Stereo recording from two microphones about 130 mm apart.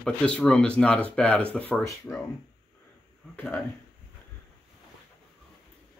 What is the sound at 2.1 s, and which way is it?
Speech, 25° left (ahead or behind).